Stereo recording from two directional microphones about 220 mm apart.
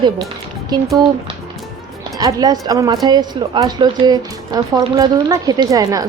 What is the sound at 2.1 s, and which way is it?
A woman's voice, 15° right (ahead or behind).